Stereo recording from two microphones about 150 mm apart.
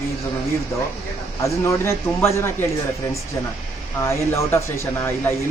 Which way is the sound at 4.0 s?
20° left (ahead or behind).